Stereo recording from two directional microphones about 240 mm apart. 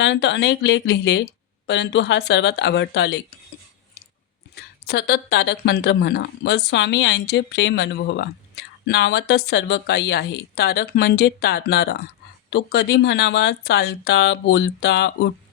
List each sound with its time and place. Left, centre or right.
0.0 s speech: left
4.9 s speech: left